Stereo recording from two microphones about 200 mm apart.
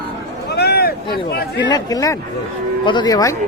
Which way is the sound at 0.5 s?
55° left (ahead or behind).